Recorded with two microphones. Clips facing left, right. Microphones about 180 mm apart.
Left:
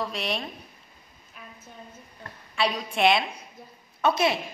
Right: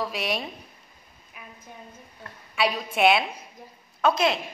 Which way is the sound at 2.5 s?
5° right (ahead or behind).